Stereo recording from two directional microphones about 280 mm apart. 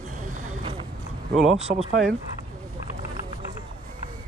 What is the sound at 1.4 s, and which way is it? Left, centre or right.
Speech, centre.